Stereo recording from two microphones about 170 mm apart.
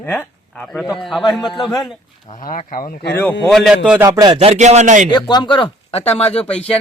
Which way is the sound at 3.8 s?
10° right (ahead or behind).